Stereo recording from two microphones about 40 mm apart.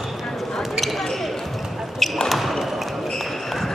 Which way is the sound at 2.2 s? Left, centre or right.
Centre.